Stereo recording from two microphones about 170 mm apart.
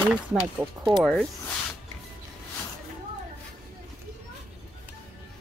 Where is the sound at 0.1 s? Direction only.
5° right (ahead or behind).